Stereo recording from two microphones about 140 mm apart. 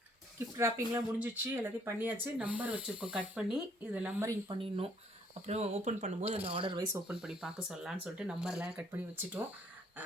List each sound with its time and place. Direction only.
0.5 s speech: 20° right (ahead or behind)
4.4 s speech: 40° right (ahead or behind)
5.5 s speech: 50° right (ahead or behind)
6.9 s speech: 5° right (ahead or behind)